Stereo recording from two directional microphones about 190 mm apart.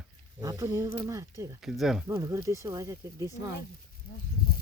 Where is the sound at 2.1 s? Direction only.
15° right (ahead or behind).